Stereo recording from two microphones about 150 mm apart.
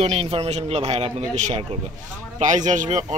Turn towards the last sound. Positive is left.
turn(degrees=-55)  # may be behind; listen again after turning